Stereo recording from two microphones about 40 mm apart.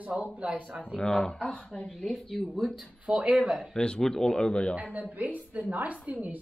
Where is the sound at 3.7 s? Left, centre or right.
Left.